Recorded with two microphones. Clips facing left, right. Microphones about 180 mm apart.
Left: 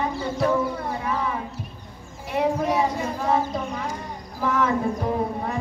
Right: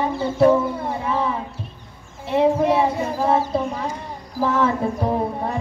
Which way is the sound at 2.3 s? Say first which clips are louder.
Right 6 dB; 25° right (ahead or behind).